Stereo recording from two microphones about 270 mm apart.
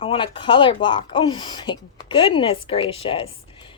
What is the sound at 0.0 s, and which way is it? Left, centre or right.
Speech, centre.